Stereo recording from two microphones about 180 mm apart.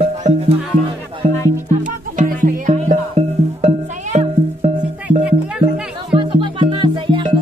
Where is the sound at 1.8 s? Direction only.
45° right (ahead or behind).